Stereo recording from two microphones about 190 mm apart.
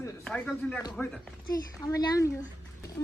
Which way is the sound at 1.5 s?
20° left (ahead or behind).